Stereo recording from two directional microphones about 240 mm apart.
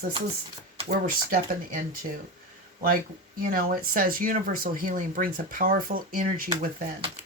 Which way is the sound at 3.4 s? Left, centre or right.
Right.